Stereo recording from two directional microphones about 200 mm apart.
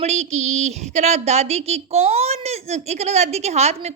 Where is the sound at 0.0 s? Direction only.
35° right (ahead or behind).